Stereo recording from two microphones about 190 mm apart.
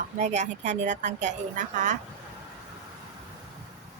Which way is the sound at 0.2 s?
35° right (ahead or behind).